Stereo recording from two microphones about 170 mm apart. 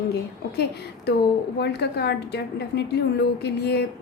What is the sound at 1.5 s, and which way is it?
A woman's voice, 75° left (ahead or behind).